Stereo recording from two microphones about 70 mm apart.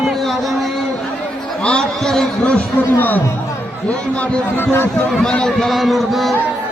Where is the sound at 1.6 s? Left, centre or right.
Centre.